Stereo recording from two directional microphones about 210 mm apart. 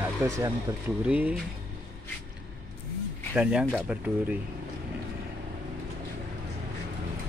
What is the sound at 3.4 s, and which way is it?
Speech, 5° right (ahead or behind).